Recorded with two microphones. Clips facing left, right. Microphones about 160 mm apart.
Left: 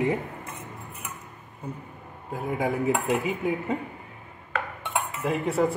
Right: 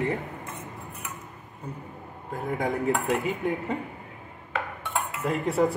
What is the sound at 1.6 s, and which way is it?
Speech, 10° left (ahead or behind).